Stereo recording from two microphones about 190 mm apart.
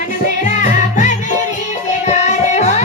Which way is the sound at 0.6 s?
40° left (ahead or behind).